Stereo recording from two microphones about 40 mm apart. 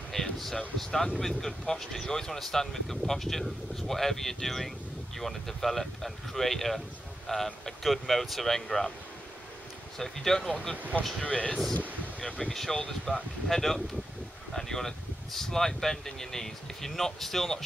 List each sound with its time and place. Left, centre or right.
0.1 s a sound: centre
0.7 s speech: centre
9.9 s speech: centre
11.1 s speech: left
12.4 s speech: centre